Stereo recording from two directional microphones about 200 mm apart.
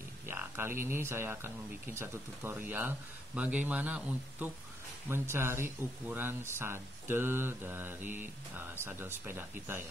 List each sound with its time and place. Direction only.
0.3 s speech: 10° right (ahead or behind)